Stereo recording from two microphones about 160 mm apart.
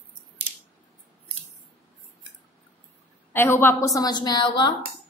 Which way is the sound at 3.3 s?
15° left (ahead or behind).